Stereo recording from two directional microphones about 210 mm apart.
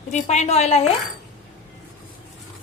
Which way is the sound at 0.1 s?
30° left (ahead or behind).